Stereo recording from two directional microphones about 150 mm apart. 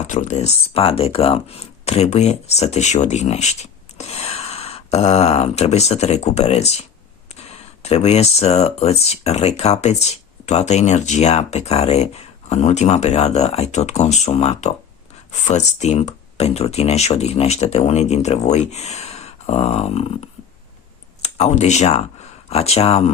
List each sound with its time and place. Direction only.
0.1 s speech: 50° left (ahead or behind)